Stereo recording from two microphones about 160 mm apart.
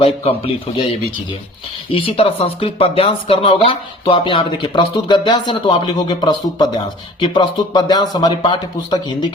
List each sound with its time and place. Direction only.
0.0 s speech: 35° left (ahead or behind)
1.9 s speech: 35° left (ahead or behind)